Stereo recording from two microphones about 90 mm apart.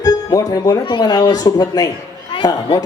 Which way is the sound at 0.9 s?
55° left (ahead or behind).